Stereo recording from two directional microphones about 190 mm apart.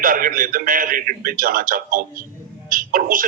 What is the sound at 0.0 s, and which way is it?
A man's voice, 45° right (ahead or behind).